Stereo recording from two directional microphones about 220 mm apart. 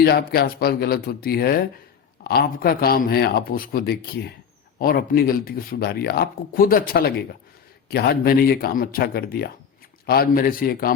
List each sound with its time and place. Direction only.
0.0 s speech: 45° left (ahead or behind)